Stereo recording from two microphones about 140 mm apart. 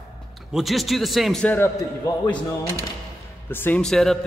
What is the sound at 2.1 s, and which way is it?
Speech, 25° left (ahead or behind).